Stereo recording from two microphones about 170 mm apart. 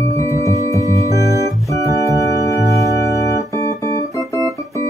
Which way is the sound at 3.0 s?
20° left (ahead or behind).